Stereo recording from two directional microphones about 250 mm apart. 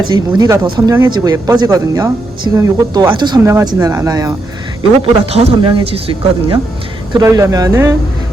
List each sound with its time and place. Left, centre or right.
0.1 s speech: centre